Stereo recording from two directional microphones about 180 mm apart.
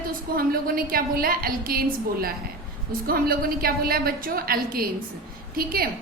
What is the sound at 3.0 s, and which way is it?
A woman's voice, 55° right (ahead or behind).